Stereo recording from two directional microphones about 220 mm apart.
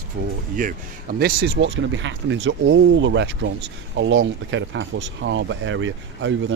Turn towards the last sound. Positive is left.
turn(degrees=-60)  # may be behind; listen again after turning